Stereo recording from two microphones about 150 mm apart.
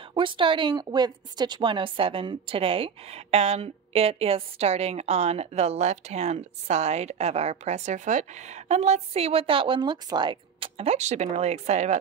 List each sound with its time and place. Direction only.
0.1 s a woman's voice: 35° right (ahead or behind)